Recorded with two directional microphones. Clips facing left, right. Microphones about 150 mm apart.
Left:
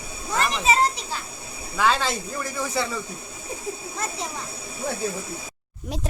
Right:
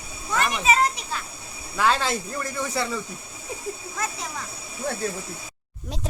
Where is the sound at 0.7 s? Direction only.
30° left (ahead or behind).